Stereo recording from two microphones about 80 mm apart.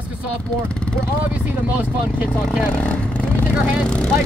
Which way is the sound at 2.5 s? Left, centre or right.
Centre.